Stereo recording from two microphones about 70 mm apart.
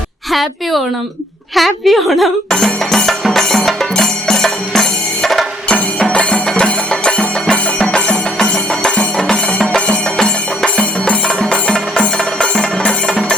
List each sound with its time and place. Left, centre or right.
0.3 s a woman's voice: centre
1.5 s music: centre